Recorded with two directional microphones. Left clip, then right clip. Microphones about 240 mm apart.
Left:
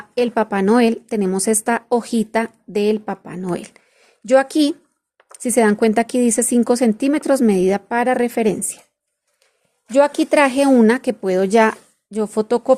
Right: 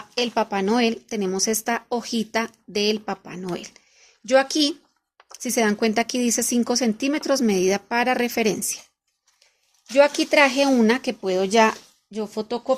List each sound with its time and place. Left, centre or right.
0.1 s a woman's voice: centre
9.9 s a woman's voice: centre